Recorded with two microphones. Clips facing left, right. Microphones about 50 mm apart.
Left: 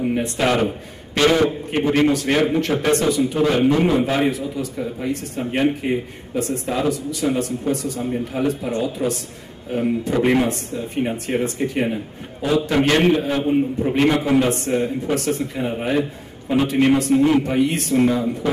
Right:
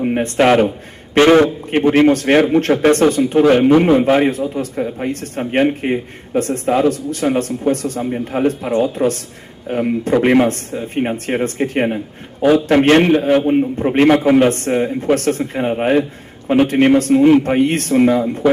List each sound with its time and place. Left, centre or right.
0.0 s a man's voice: right
17.9 s a man's voice: right